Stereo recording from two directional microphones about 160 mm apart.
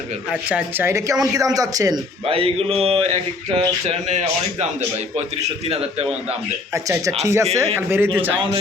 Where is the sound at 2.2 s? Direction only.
35° right (ahead or behind).